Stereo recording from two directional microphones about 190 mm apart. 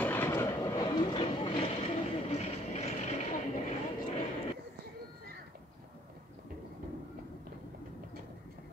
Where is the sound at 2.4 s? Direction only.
35° left (ahead or behind).